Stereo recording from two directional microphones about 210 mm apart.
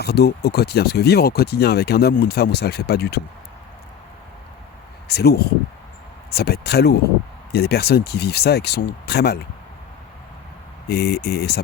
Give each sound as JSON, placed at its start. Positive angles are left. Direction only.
{"t": 0.0, "sound": "speech", "side_deg": 50}
{"t": 5.0, "sound": "speech", "side_deg": 50}
{"t": 10.8, "sound": "speech", "side_deg": 50}